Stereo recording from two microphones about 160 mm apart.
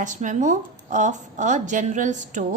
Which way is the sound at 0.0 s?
50° right (ahead or behind).